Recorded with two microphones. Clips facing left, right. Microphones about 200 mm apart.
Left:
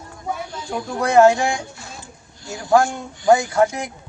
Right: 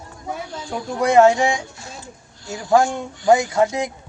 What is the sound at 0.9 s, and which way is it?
Speech, 20° right (ahead or behind).